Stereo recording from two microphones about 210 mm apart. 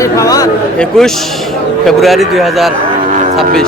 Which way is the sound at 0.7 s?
Centre (ahead or behind).